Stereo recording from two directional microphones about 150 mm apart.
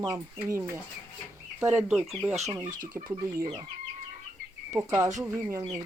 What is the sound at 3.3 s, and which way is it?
Speech, 25° right (ahead or behind).